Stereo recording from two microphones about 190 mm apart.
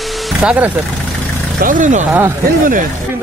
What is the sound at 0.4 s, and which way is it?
Speech, 5° right (ahead or behind).